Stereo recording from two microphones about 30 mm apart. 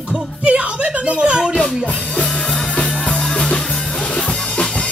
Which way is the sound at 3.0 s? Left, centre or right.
Left.